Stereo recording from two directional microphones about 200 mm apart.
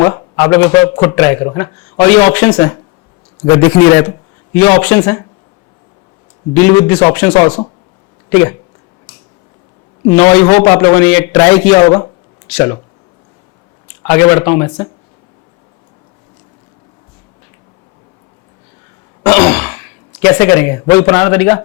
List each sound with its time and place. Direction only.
0.0 s a man's voice: 20° left (ahead or behind)
6.5 s a man's voice: 10° left (ahead or behind)
8.3 s speech: 10° left (ahead or behind)
10.1 s a man's voice: 10° left (ahead or behind)
14.0 s a man's voice: 15° left (ahead or behind)
19.2 s throat clearing: 10° left (ahead or behind)
20.2 s a man's voice: 10° left (ahead or behind)